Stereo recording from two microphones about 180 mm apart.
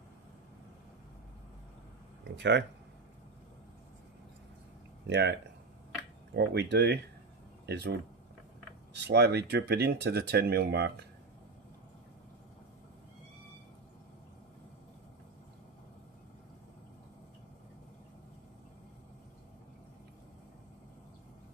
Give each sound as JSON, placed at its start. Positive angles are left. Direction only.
{"t": 2.2, "sound": "speech", "side_deg": -75}
{"t": 5.0, "sound": "speech", "side_deg": -70}